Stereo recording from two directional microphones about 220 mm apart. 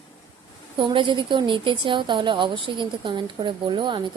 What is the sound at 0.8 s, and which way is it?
Speech, 20° right (ahead or behind).